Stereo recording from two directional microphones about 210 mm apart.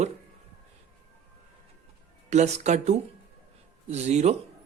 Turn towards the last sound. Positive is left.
turn(degrees=-30)  # may be behind; listen again after turning